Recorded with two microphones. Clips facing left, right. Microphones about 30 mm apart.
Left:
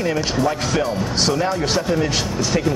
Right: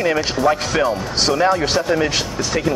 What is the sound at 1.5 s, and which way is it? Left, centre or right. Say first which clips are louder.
Speech: right 2 dB; centre.